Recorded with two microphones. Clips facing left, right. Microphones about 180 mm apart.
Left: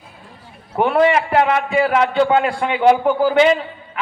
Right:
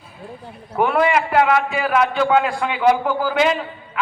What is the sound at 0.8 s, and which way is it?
A man's voice, 30° left (ahead or behind).